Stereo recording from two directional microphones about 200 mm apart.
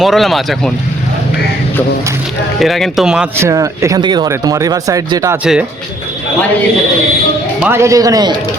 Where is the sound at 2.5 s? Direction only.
Centre (ahead or behind); by 5.4 s 15° right (ahead or behind).